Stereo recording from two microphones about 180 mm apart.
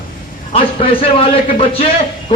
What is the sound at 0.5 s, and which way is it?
Speech, 30° left (ahead or behind).